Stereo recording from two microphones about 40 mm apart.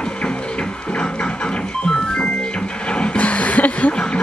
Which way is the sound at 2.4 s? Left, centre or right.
Left.